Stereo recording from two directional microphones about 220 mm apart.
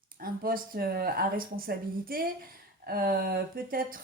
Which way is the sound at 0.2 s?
40° right (ahead or behind).